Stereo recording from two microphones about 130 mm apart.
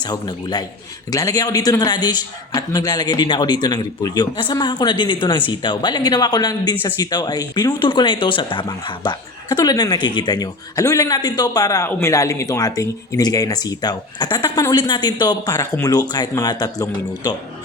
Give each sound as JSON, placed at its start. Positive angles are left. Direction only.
{"t": 0.0, "sound": "speech", "side_deg": 35}